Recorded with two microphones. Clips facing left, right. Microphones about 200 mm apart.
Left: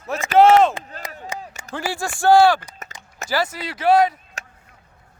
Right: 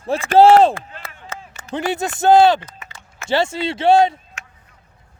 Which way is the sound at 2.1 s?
20° right (ahead or behind).